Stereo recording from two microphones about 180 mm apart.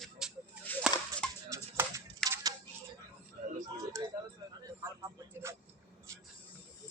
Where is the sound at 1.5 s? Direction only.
15° right (ahead or behind).